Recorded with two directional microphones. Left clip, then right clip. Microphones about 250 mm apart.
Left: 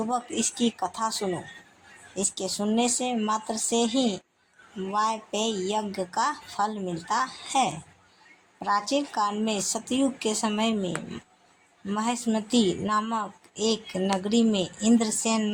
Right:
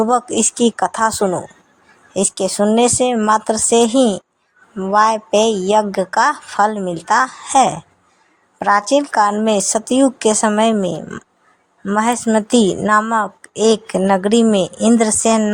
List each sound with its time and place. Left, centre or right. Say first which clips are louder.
0.0 s a woman's voice: right 13 dB; right